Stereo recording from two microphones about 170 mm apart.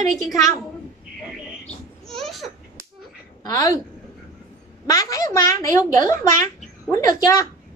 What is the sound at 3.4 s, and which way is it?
Speech, 20° left (ahead or behind).